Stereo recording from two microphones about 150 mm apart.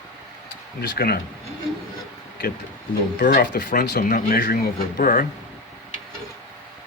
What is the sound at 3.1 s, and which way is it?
Speech, 70° left (ahead or behind).